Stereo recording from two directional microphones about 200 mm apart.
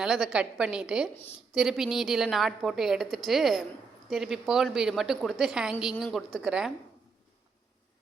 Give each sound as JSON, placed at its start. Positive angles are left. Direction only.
{"t": 0.0, "sound": "a woman's voice", "side_deg": 0}